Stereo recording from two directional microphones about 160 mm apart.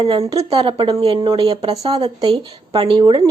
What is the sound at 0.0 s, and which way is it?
Speech, 35° right (ahead or behind).